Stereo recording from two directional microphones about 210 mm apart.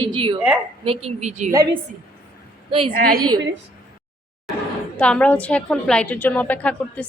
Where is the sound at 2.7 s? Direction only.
25° right (ahead or behind).